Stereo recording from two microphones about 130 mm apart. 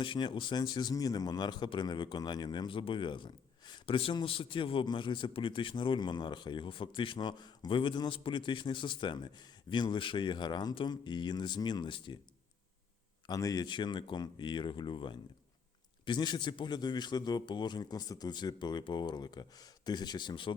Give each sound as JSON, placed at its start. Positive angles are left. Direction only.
{"t": 0.0, "sound": "a man's voice", "side_deg": 40}
{"t": 13.2, "sound": "a man's voice", "side_deg": 30}